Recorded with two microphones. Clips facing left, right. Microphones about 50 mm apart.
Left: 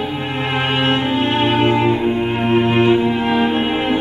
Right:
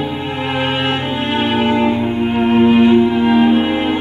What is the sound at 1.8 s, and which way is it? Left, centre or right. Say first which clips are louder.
Cello: right 1 dB; centre.